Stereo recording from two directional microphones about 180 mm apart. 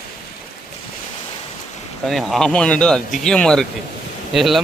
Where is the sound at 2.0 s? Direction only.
Centre (ahead or behind).